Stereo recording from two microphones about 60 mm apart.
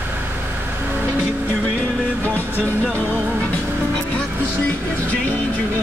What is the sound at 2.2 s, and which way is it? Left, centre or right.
Music, left.